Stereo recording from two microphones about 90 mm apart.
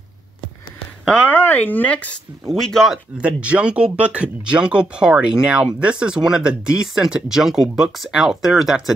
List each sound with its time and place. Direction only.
1.0 s speech: 10° left (ahead or behind)
1.3 s speech: 25° left (ahead or behind)
2.4 s speech: 5° left (ahead or behind)
3.2 s speech: 15° right (ahead or behind)